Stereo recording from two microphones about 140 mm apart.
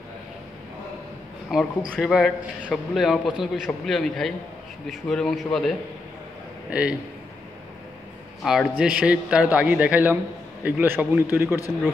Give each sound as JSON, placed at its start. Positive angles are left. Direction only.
{"t": 1.5, "sound": "a man's voice", "side_deg": -5}
{"t": 6.7, "sound": "a man's voice", "side_deg": -10}
{"t": 8.5, "sound": "a man's voice", "side_deg": -5}